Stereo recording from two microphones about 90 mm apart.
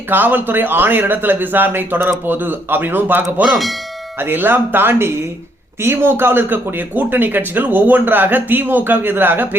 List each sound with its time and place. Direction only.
0.1 s speech: 20° right (ahead or behind)
3.5 s speech: centre (ahead or behind)
4.2 s speech: 25° right (ahead or behind)